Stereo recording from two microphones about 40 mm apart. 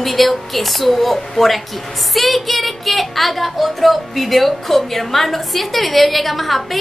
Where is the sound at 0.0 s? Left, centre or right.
Centre.